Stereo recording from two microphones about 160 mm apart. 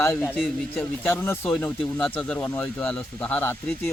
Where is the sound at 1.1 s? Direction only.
15° left (ahead or behind).